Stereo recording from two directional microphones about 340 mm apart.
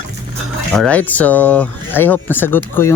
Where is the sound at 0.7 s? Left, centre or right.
Centre.